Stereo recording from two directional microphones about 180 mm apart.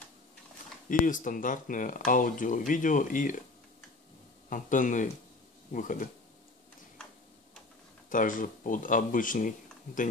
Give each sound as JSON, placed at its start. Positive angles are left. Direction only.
{"t": 0.8, "sound": "speech", "side_deg": 45}
{"t": 4.5, "sound": "speech", "side_deg": 45}
{"t": 8.1, "sound": "speech", "side_deg": 45}